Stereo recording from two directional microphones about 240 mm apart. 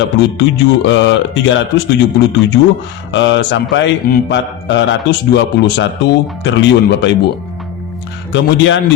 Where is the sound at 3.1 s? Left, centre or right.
Left.